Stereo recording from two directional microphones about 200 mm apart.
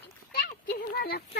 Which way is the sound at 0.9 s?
50° left (ahead or behind).